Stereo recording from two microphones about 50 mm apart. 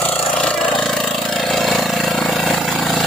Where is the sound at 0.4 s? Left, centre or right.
Centre.